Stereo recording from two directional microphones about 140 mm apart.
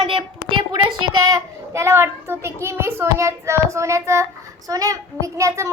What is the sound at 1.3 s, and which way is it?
A child's voice, 20° right (ahead or behind).